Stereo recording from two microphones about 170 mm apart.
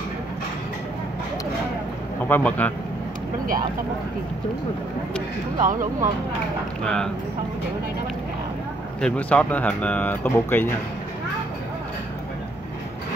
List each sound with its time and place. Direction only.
2.2 s speech: 10° left (ahead or behind)
5.6 s speech: 50° right (ahead or behind)
6.8 s speech: 5° left (ahead or behind)
9.0 s speech: 5° left (ahead or behind)